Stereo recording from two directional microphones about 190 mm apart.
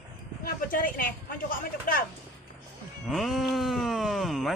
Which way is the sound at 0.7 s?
45° left (ahead or behind).